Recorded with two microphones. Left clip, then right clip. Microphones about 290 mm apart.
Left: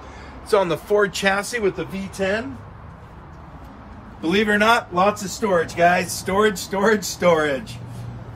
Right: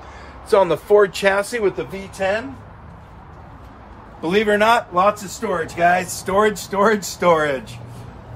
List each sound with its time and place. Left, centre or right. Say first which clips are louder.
0.5 s speech: right 4 dB; right
4.2 s a man's voice: right 2 dB; right
5.8 s speech: right 4 dB; centre; by 7.5 s right